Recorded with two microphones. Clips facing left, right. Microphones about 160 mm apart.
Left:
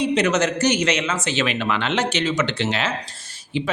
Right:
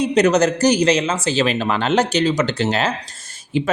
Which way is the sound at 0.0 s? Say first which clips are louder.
Right 4 dB; 40° right (ahead or behind).